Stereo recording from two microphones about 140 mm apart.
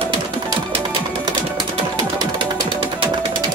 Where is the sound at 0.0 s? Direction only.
35° right (ahead or behind).